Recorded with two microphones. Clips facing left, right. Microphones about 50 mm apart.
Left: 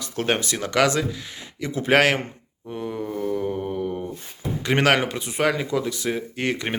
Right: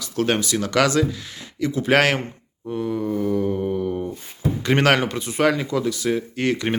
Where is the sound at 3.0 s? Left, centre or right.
Centre.